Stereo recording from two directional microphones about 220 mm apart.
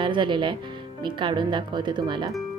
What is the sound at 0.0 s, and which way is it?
Speech, 20° right (ahead or behind).